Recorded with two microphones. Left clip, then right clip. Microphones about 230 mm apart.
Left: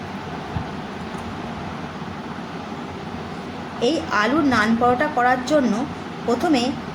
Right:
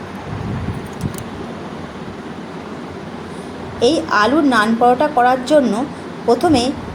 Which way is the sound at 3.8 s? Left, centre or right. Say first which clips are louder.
Right 6 dB; centre.